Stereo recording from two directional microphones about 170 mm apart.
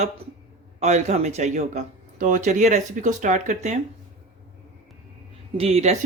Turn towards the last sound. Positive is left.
turn(degrees=-40)  # may be behind; listen again after turning